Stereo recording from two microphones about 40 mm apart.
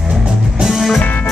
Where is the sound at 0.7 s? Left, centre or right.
Centre.